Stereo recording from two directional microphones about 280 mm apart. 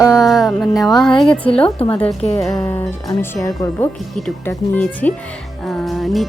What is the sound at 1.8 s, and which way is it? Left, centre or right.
Speech, left.